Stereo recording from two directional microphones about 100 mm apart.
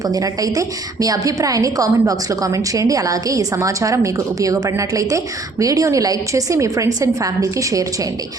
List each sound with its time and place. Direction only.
0.0 s a woman's voice: 35° right (ahead or behind)